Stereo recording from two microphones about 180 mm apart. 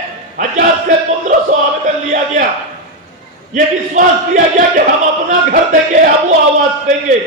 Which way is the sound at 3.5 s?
45° right (ahead or behind).